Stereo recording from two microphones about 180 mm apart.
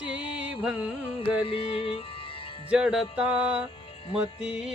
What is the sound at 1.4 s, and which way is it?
Music, 30° left (ahead or behind).